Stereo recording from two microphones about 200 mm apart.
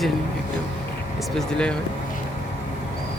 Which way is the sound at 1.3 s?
5° left (ahead or behind).